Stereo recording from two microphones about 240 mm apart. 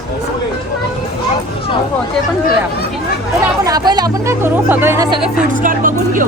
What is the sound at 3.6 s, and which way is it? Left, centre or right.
Speech, centre.